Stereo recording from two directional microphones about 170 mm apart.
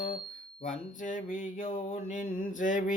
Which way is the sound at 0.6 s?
50° left (ahead or behind).